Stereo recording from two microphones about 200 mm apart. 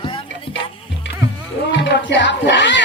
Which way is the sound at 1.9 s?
60° left (ahead or behind).